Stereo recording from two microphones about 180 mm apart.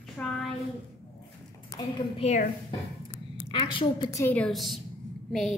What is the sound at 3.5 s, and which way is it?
A woman's voice, 25° left (ahead or behind).